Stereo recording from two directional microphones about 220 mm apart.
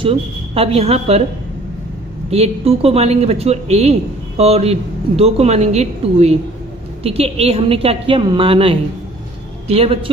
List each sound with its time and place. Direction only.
0.0 s a man's voice: 25° right (ahead or behind)
2.3 s a man's voice: 25° right (ahead or behind)